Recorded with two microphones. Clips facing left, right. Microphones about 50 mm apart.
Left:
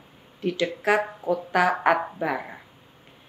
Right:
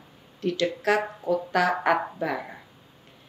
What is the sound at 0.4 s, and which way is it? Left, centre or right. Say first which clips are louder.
Speech: even; centre.